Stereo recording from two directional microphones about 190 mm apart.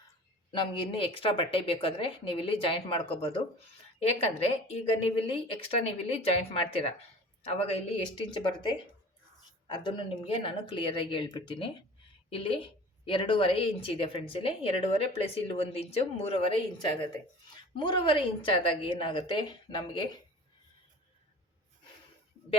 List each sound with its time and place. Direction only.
0.5 s speech: 25° left (ahead or behind)
9.7 s a woman's voice: 25° left (ahead or behind)